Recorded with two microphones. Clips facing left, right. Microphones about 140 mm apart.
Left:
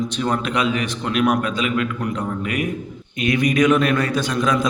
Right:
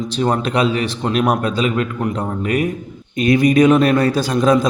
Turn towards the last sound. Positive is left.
turn(degrees=-35)  # may be behind; listen again after turning